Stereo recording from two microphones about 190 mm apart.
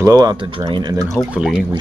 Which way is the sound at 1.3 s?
5° right (ahead or behind).